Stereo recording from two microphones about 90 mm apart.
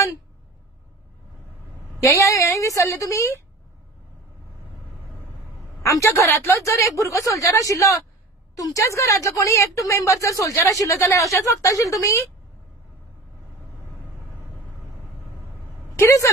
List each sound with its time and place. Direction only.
2.1 s speech: 35° left (ahead or behind)
5.8 s speech: 35° left (ahead or behind)
16.0 s speech: 35° left (ahead or behind)